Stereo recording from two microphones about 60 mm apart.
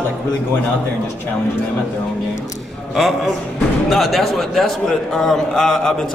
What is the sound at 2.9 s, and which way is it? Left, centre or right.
A man's voice, centre.